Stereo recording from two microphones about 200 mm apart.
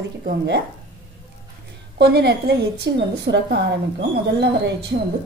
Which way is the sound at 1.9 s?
55° right (ahead or behind).